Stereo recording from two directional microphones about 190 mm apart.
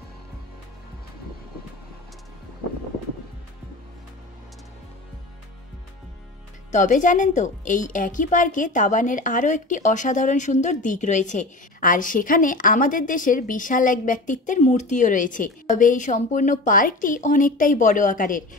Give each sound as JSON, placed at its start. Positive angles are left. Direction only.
{"t": 6.7, "sound": "a woman's voice", "side_deg": 40}